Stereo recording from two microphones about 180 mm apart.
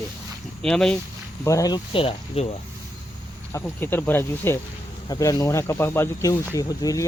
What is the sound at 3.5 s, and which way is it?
Speech, 10° left (ahead or behind).